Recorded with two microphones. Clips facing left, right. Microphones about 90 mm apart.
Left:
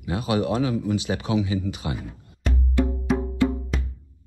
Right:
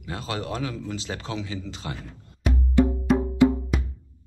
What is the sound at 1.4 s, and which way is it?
Speech, 15° left (ahead or behind).